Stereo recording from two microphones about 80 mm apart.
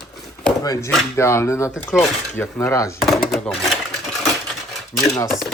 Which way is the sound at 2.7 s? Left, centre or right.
Left.